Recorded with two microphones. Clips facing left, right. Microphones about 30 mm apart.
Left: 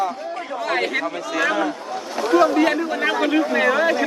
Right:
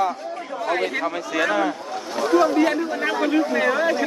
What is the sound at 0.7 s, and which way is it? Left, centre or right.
Speech, left.